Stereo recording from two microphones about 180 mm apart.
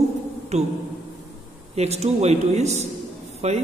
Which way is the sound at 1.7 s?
35° right (ahead or behind).